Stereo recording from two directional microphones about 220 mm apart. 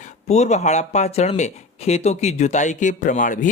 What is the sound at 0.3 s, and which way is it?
Speech, 30° left (ahead or behind).